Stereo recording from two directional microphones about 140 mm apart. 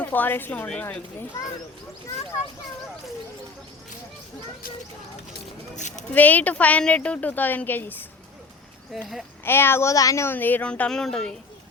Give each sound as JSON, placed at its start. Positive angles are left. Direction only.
{"t": 0.0, "sound": "speech", "side_deg": 15}
{"t": 5.7, "sound": "speech", "side_deg": 60}
{"t": 6.1, "sound": "speech", "side_deg": 10}
{"t": 8.9, "sound": "speech", "side_deg": 0}
{"t": 9.4, "sound": "speech", "side_deg": 15}